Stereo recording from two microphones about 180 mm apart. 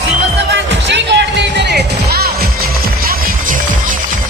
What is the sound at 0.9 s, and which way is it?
Music, 75° right (ahead or behind).